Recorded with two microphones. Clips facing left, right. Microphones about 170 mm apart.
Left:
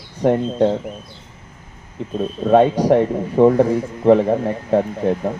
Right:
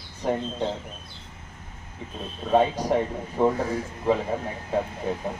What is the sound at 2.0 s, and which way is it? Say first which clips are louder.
Speech: left 13 dB; 65° left (ahead or behind).